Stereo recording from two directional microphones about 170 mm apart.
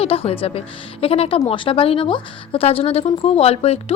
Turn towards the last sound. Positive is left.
turn(degrees=35)  # may be behind; listen again after turning